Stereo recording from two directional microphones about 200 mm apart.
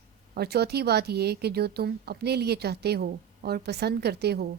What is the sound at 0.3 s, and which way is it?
Speech, 55° right (ahead or behind).